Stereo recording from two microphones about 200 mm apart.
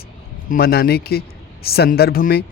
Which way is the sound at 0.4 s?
50° left (ahead or behind).